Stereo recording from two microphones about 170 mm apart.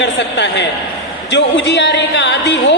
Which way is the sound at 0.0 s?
90° left.